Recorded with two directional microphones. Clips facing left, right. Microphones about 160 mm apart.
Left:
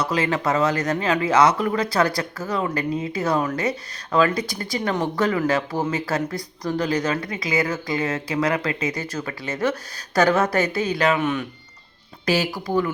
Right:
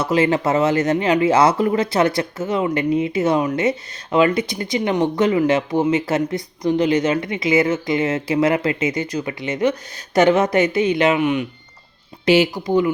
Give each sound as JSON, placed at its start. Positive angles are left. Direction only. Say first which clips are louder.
{"t": 0.0, "sound": "speech", "louder": "right 5 dB", "side_deg": -25}